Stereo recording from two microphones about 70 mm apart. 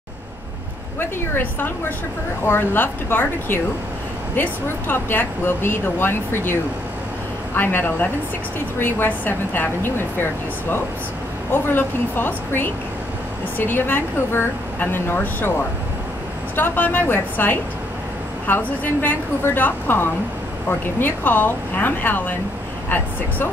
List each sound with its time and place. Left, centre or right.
0.9 s a woman's voice: left
11.5 s a woman's voice: left
16.5 s a woman's voice: left